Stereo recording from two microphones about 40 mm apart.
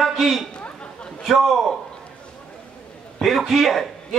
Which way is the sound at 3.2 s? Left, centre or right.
Centre.